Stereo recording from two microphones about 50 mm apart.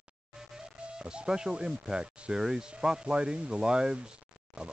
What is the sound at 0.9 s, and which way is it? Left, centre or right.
Speech, centre.